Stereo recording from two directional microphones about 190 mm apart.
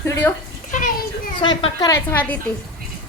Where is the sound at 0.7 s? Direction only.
45° left (ahead or behind).